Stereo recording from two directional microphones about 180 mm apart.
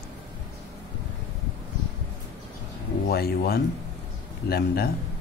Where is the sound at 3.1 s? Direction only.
60° left (ahead or behind).